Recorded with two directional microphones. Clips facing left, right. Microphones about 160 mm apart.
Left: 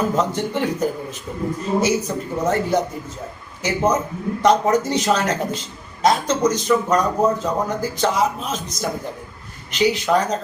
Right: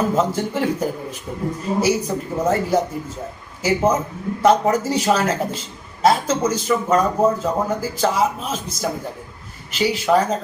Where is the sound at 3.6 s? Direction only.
10° right (ahead or behind).